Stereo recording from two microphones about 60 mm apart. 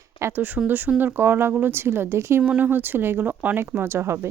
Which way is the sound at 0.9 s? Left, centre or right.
Right.